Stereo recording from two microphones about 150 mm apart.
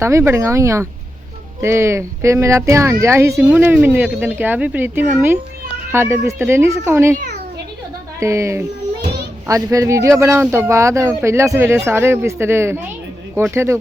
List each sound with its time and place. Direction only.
0.0 s a child's voice: 20° right (ahead or behind)
8.2 s a child's voice: 20° right (ahead or behind)